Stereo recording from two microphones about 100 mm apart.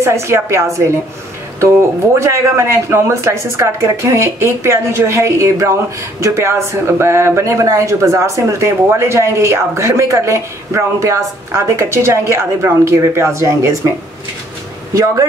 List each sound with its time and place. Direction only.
0.0 s speech: 30° right (ahead or behind)